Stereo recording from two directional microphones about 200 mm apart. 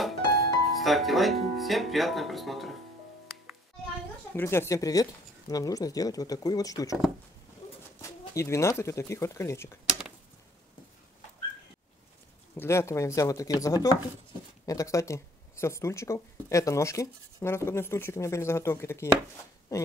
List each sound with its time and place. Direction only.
0.0 s speech: centre (ahead or behind)
4.4 s speech: 10° left (ahead or behind)
8.0 s speech: 15° left (ahead or behind)
9.8 s a sound: centre (ahead or behind)
12.5 s speech: 15° left (ahead or behind)